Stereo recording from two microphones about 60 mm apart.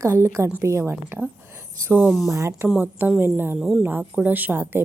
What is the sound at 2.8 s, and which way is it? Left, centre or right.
Speech, right.